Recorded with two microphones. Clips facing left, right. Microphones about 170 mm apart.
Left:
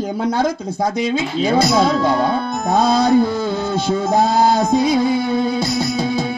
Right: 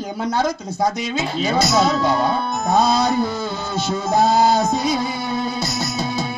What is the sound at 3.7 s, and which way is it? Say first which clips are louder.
Music: left 2 dB; 55° left (ahead or behind).